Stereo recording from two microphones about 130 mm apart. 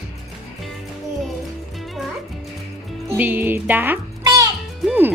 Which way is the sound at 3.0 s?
15° right (ahead or behind).